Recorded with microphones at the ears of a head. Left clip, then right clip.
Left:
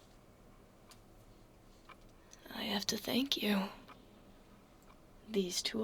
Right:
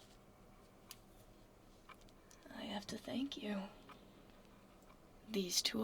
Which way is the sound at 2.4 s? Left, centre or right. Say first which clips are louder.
Left 9 dB; left.